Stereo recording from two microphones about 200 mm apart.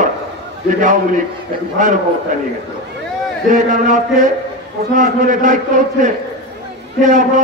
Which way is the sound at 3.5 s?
40° right (ahead or behind).